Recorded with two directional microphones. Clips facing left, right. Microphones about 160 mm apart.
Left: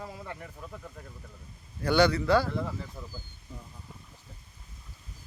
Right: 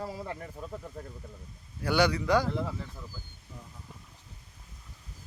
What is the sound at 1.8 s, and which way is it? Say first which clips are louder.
Speech: left 2 dB; 10° right (ahead or behind).